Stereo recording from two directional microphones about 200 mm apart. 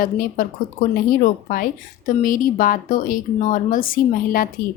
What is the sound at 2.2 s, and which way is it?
A woman's voice, 40° left (ahead or behind).